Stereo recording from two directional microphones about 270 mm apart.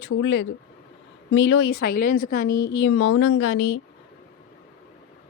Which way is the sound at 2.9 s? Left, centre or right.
Left.